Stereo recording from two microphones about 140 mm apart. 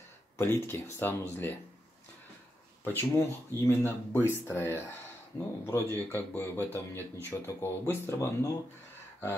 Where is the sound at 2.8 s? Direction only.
15° left (ahead or behind).